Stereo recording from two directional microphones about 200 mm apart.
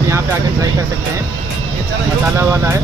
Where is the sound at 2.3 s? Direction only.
15° right (ahead or behind).